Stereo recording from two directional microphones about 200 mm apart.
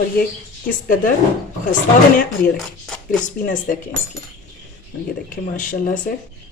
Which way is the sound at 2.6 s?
Centre (ahead or behind).